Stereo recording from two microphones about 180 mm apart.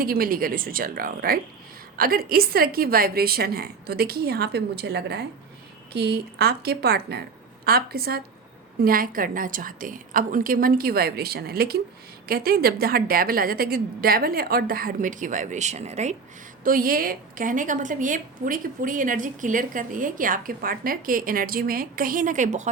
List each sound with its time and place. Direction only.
0.0 s a woman's voice: 55° right (ahead or behind); by 16.1 s 40° right (ahead or behind)
16.6 s a woman's voice: 50° right (ahead or behind)